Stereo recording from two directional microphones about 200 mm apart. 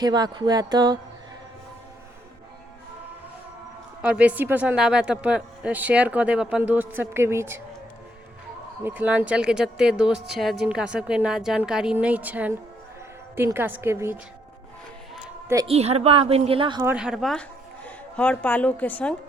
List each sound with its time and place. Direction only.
0.0 s a woman's voice: 20° right (ahead or behind)
4.0 s a man's voice: 5° right (ahead or behind)
8.8 s a woman's voice: 10° right (ahead or behind)
15.6 s a woman's voice: 30° right (ahead or behind)
16.8 s a woman's voice: 5° right (ahead or behind)